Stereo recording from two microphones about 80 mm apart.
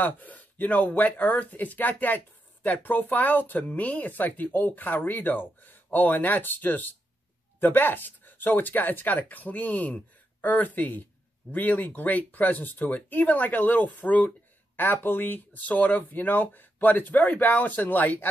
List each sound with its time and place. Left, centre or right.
0.0 s speech: left